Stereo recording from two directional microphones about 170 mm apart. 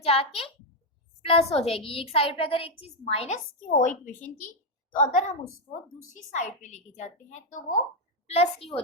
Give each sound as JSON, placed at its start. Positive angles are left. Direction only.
{"t": 0.0, "sound": "a woman's voice", "side_deg": 35}